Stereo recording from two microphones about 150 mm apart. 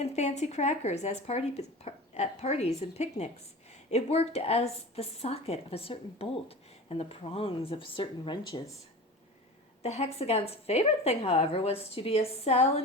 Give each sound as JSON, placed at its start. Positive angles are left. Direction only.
{"t": 0.0, "sound": "a woman's voice", "side_deg": 50}
{"t": 9.8, "sound": "speech", "side_deg": 45}